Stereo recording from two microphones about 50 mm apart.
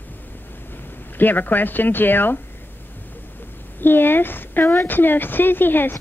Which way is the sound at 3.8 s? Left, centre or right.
Left.